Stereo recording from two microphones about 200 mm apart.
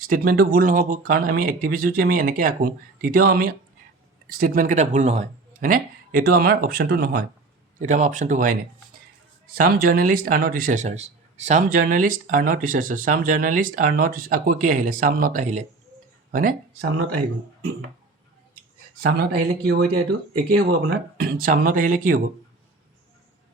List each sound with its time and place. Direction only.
0.0 s speech: 45° right (ahead or behind)
7.8 s speech: 35° right (ahead or behind)
9.6 s speech: 50° right (ahead or behind)
18.9 s speech: 50° right (ahead or behind)
20.9 s speech: 45° right (ahead or behind)